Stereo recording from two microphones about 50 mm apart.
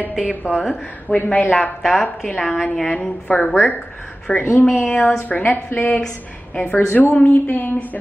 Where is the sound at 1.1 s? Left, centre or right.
Left.